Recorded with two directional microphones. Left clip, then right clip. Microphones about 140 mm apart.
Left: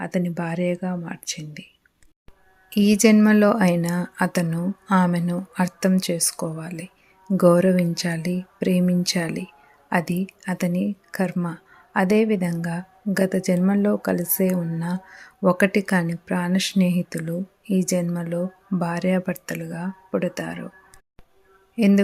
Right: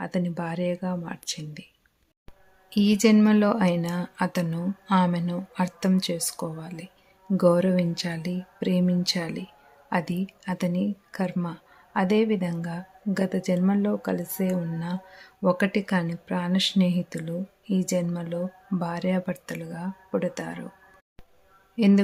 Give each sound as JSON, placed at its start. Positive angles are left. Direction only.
{"t": 0.0, "sound": "speech", "side_deg": 10}
{"t": 2.7, "sound": "a woman's voice", "side_deg": 20}
{"t": 21.8, "sound": "a sound", "side_deg": 20}